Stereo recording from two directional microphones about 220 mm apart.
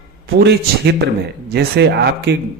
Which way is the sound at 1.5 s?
50° right (ahead or behind).